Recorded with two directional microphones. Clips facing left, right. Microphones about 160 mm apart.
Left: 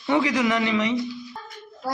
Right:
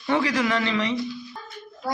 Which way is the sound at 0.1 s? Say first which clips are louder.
Left 1 dB; 20° left (ahead or behind).